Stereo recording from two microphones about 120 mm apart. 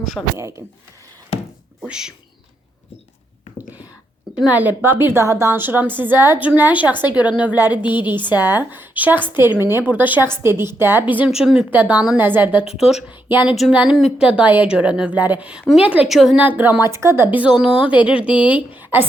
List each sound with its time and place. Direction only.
0.0 s a woman's voice: centre (ahead or behind)
1.3 s a sound: 55° left (ahead or behind)
1.9 s a woman's voice: 5° right (ahead or behind)
4.4 s a woman's voice: 15° right (ahead or behind)
16.4 s a woman's voice: 15° right (ahead or behind)